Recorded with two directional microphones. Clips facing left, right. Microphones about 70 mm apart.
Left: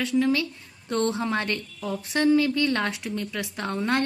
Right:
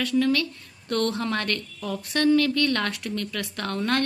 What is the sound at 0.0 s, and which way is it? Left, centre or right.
A woman's voice, centre.